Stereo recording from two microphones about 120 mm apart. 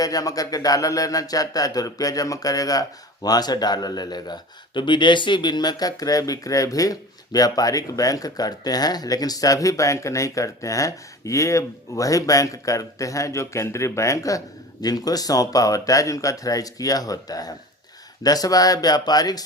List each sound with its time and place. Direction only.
0.0 s a man's voice: 30° left (ahead or behind)